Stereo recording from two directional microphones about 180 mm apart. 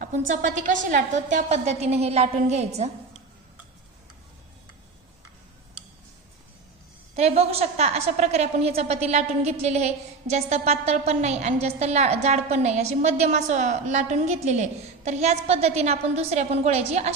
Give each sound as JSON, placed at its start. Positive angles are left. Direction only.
{"t": 0.3, "sound": "a woman's voice", "side_deg": -45}
{"t": 7.2, "sound": "a woman's voice", "side_deg": -35}